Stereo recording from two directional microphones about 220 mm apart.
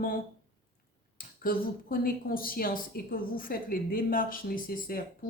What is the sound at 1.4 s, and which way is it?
A woman's voice, 40° left (ahead or behind).